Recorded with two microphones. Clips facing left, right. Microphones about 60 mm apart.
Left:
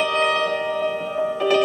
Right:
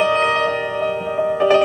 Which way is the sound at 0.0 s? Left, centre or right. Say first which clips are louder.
Right 4 dB; right.